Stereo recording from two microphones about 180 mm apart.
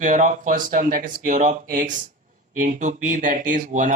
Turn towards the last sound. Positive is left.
turn(degrees=-45)  # may be behind; listen again after turning